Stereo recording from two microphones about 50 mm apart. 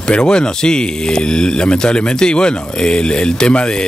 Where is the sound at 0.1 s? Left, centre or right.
Centre.